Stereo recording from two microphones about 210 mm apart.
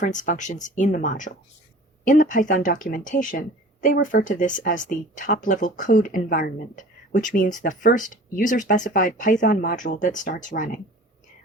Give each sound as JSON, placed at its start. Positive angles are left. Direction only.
{"t": 0.0, "sound": "speech", "side_deg": 35}